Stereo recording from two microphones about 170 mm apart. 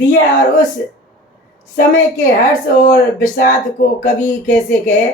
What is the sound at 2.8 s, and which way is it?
Speech, 60° left (ahead or behind).